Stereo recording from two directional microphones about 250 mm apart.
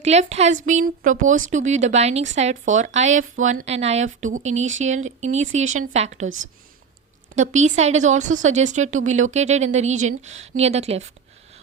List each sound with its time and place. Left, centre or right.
0.0 s a woman's voice: right
7.3 s a woman's voice: right